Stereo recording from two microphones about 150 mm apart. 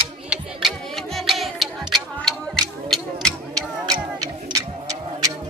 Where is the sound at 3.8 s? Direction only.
25° right (ahead or behind).